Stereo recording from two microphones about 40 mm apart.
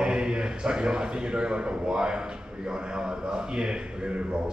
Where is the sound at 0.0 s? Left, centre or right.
Centre.